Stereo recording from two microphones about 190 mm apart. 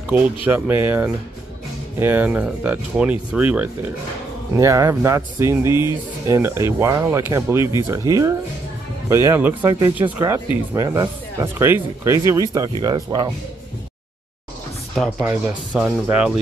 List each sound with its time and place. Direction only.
0.5 s speech: 10° right (ahead or behind)
15.2 s speech: 5° right (ahead or behind)